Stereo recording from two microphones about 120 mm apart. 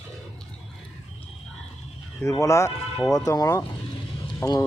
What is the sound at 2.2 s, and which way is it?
Speech, 25° left (ahead or behind).